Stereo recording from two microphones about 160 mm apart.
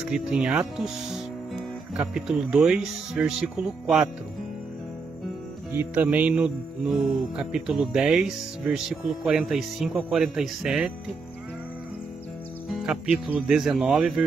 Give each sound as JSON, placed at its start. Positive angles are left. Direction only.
{"t": 0.0, "sound": "speech", "side_deg": -5}
{"t": 5.7, "sound": "speech", "side_deg": -10}
{"t": 12.6, "sound": "speech", "side_deg": -5}